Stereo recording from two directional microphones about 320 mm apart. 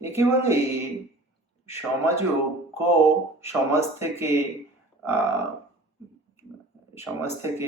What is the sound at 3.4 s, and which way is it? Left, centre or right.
Speech, centre.